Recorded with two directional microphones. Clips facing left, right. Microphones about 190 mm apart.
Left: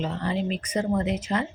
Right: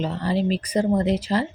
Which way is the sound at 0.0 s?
35° right (ahead or behind).